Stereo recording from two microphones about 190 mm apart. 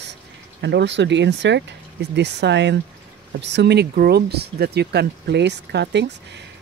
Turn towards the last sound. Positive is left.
turn(degrees=-65)  # may be behind; listen again after turning